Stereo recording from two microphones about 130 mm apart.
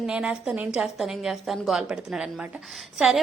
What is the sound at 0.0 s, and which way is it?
A woman's voice, 5° right (ahead or behind).